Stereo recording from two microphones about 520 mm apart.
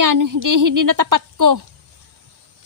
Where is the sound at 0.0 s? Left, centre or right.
Right.